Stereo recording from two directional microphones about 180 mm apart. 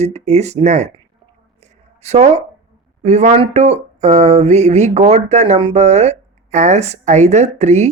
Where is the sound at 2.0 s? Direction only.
35° right (ahead or behind).